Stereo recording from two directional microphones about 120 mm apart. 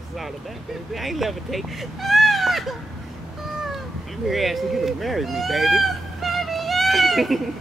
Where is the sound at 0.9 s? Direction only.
Centre (ahead or behind).